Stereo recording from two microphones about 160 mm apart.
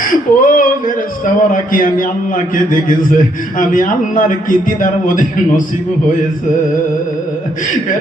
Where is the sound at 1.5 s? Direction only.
60° left (ahead or behind).